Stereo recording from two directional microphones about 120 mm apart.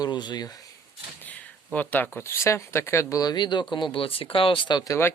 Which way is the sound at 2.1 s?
25° left (ahead or behind).